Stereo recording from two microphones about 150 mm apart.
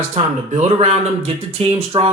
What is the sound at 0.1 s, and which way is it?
Speech, 45° right (ahead or behind).